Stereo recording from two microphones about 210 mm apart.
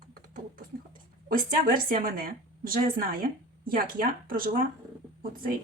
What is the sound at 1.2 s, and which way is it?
A woman's voice, 40° right (ahead or behind).